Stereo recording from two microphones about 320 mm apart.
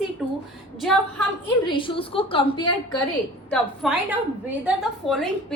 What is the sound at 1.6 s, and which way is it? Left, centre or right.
A woman's voice, centre.